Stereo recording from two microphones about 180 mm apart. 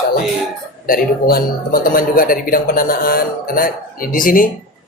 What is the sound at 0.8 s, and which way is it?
A man's voice, 55° left (ahead or behind).